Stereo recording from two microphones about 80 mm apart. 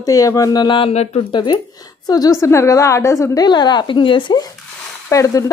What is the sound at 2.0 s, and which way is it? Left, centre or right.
Speech, left.